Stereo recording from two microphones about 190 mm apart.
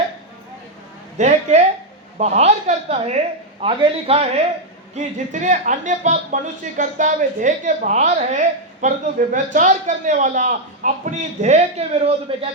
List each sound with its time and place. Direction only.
1.2 s a man's voice: 35° right (ahead or behind)